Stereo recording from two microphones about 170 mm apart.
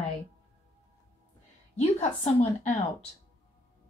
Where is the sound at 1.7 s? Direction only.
40° left (ahead or behind).